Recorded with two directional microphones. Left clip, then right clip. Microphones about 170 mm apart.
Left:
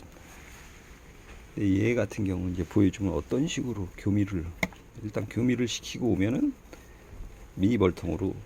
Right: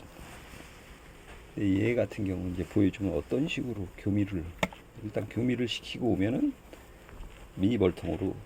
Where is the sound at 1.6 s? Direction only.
15° left (ahead or behind).